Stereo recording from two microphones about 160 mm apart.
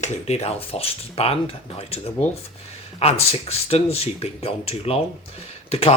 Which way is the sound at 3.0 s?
40° left (ahead or behind).